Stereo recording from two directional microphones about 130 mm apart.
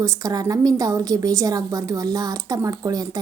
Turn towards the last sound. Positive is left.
turn(degrees=-30)  # may be behind; listen again after turning